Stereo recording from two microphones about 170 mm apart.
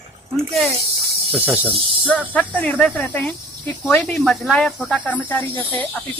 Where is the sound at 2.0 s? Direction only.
10° left (ahead or behind).